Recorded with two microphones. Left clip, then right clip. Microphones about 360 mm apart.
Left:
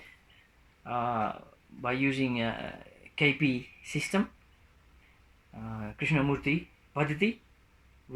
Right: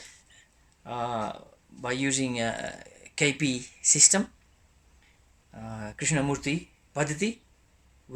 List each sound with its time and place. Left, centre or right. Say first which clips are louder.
0.9 s speech: left 1 dB; centre
5.6 s speech: right 1 dB; centre